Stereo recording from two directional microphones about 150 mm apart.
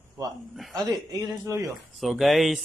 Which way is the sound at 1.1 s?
25° right (ahead or behind).